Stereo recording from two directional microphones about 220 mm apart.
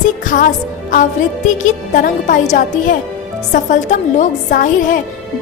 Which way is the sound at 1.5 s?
35° left (ahead or behind).